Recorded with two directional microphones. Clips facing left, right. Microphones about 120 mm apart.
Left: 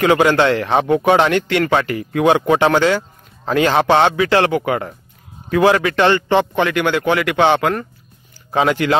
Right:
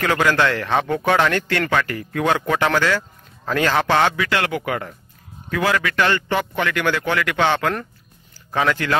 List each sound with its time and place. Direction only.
0.0 s speech: 20° left (ahead or behind)